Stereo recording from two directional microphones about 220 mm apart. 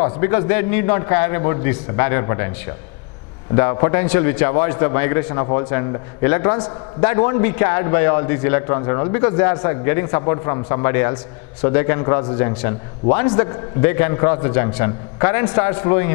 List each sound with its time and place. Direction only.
0.0 s a man's voice: 10° left (ahead or behind)
3.5 s a man's voice: 15° left (ahead or behind)